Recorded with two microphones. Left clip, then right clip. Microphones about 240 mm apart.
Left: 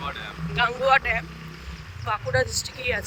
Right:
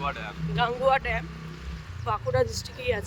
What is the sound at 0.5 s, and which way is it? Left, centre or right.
Speech, centre.